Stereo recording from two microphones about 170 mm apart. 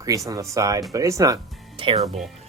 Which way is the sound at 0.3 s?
20° right (ahead or behind).